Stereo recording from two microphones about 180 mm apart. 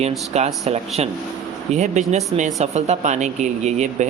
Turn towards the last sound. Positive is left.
turn(degrees=-40)  # may be behind; listen again after turning